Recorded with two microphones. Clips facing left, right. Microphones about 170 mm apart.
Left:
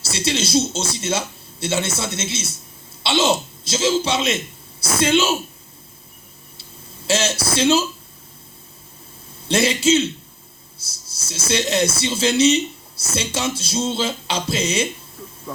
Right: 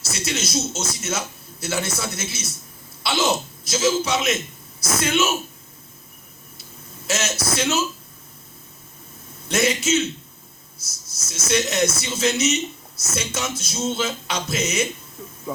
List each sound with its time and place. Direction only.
0.0 s a man's voice: 30° left (ahead or behind)
7.1 s speech: 30° left (ahead or behind)
9.5 s speech: 30° left (ahead or behind)
15.5 s speech: 10° right (ahead or behind)